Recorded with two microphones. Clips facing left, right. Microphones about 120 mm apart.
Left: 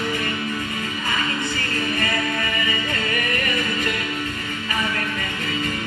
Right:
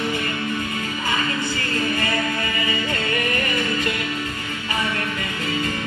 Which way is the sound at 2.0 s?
30° right (ahead or behind).